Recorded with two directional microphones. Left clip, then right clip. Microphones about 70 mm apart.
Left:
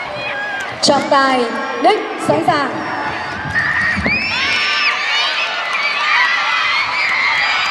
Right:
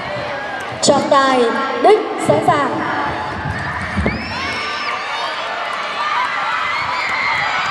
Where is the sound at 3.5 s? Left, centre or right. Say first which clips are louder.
Left 7 dB; left.